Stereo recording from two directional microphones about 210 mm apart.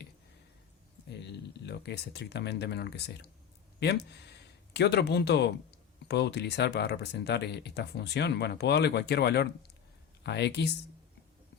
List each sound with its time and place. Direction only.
1.3 s speech: 50° left (ahead or behind)